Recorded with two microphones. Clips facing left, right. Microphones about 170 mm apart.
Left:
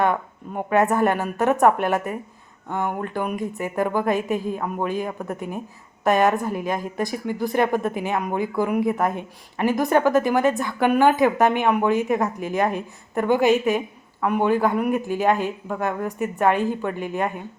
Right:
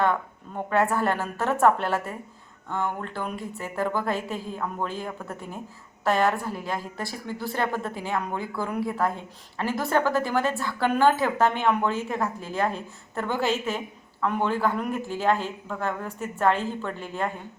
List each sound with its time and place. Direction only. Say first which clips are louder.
0.0 s a woman's voice: left 3 dB; 15° left (ahead or behind)